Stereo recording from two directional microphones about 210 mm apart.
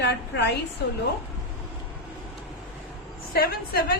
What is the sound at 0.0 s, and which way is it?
Speech, 50° left (ahead or behind).